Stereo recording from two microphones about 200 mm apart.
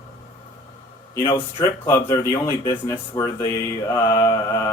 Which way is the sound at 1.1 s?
15° left (ahead or behind).